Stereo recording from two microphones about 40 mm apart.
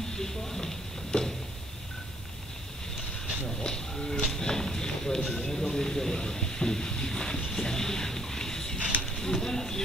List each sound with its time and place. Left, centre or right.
0.1 s speech: centre
3.4 s speech: centre
4.4 s a sound: centre